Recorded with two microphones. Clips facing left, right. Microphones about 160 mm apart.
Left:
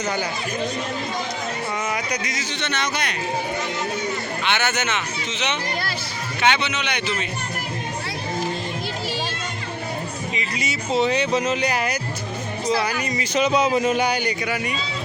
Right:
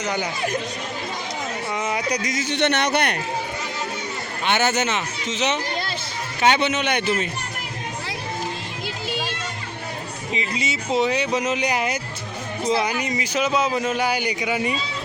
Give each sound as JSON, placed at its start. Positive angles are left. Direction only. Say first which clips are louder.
{"t": 0.0, "sound": "speech", "louder": "even", "side_deg": -15}
{"t": 2.0, "sound": "speech", "louder": "right 3 dB", "side_deg": -35}
{"t": 2.5, "sound": "a man's voice", "louder": "right 7 dB", "side_deg": -60}
{"t": 4.4, "sound": "a man's voice", "louder": "right 4 dB", "side_deg": -40}
{"t": 10.3, "sound": "speech", "louder": "right 5 dB", "side_deg": -25}
{"t": 10.9, "sound": "speech", "louder": "left 1 dB", "side_deg": -10}
{"t": 13.3, "sound": "speech", "louder": "left 3 dB", "side_deg": -5}